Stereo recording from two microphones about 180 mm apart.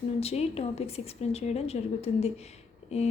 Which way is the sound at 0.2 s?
35° left (ahead or behind).